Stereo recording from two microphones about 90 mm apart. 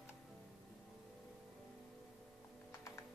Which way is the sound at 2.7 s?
35° left (ahead or behind).